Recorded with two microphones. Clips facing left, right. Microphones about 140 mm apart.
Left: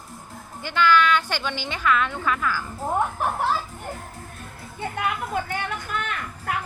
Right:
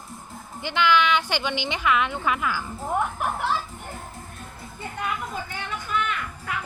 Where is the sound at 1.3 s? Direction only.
15° right (ahead or behind).